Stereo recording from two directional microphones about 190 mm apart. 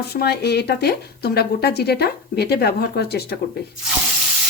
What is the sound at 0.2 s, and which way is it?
Speech, 60° left (ahead or behind).